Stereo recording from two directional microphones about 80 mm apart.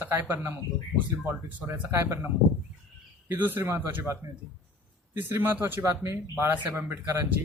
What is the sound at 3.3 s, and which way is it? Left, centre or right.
A man's voice, right.